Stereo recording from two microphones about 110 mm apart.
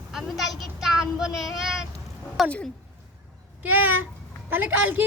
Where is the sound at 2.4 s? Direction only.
Centre (ahead or behind).